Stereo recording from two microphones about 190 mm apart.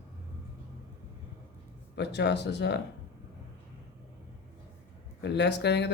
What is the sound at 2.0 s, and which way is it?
Speech, 65° left (ahead or behind).